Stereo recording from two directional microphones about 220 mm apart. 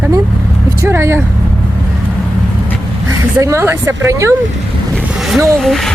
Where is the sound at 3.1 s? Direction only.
15° right (ahead or behind).